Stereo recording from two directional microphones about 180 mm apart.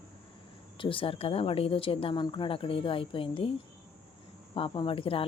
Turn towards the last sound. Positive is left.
turn(degrees=30)  # may be behind; listen again after turning